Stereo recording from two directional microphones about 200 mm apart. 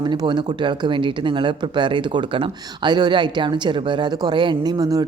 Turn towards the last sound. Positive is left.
turn(degrees=-20)  # may be behind; listen again after turning